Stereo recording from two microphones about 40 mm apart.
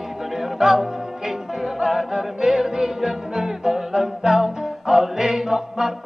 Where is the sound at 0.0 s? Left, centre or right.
Centre.